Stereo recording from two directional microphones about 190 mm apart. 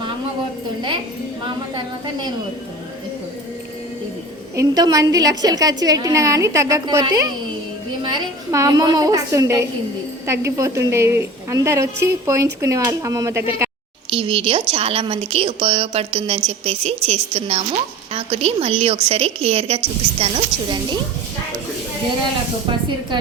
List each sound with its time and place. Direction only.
4.5 s a woman's voice: 20° right (ahead or behind)
14.1 s a woman's voice: 30° right (ahead or behind)